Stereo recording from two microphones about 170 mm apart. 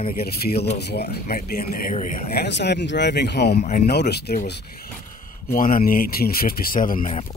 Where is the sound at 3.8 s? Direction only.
75° left (ahead or behind).